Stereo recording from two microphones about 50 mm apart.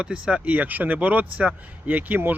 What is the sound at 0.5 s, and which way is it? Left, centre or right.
Speech, right.